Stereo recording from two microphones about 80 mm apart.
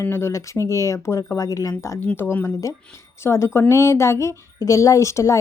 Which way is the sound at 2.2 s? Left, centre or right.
Left.